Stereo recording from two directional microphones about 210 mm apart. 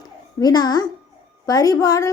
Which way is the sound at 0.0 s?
20° left (ahead or behind).